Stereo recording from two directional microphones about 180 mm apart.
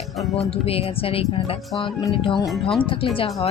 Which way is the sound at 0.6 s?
35° left (ahead or behind).